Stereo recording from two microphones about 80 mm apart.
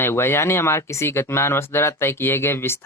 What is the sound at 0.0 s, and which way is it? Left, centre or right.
Speech, left.